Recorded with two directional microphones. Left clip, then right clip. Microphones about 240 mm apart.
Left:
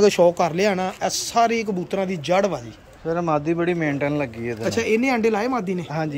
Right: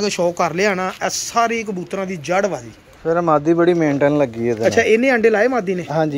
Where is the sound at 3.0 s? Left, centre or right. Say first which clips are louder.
Right 7 dB; centre.